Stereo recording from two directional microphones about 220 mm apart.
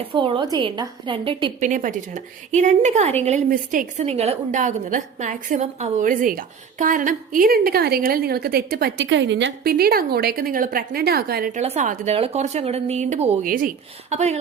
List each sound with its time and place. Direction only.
0.0 s a woman's voice: 25° right (ahead or behind)
1.5 s a woman's voice: 35° right (ahead or behind)
11.6 s a woman's voice: 30° right (ahead or behind)